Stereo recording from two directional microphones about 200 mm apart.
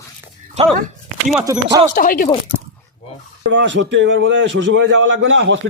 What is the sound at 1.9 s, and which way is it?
Speech, 45° left (ahead or behind).